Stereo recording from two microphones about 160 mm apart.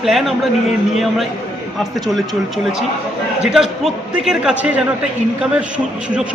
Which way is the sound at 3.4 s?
5° right (ahead or behind).